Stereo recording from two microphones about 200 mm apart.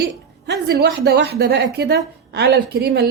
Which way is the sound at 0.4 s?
55° right (ahead or behind).